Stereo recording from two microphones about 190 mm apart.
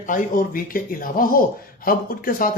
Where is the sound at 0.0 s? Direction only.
45° left (ahead or behind).